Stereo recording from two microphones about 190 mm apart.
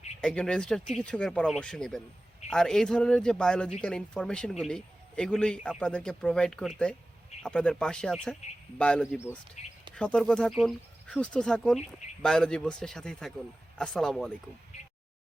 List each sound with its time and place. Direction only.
0.2 s a man's voice: 5° left (ahead or behind)
9.6 s speech: 35° left (ahead or behind)
9.9 s a man's voice: 5° left (ahead or behind)
11.8 s speech: 35° left (ahead or behind)
12.2 s a man's voice: 5° left (ahead or behind)